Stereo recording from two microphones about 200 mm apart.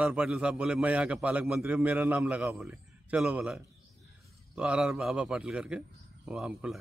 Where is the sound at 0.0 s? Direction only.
5° right (ahead or behind).